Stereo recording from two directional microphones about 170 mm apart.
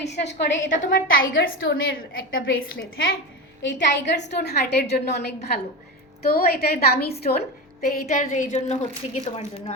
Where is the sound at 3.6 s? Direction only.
90° left.